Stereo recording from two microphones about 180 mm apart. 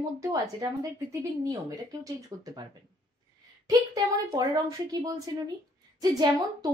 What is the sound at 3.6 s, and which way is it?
A woman's voice, 20° right (ahead or behind).